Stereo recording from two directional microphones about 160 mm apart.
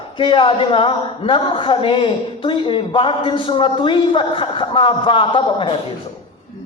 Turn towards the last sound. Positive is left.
turn(degrees=30)  # may be behind; listen again after turning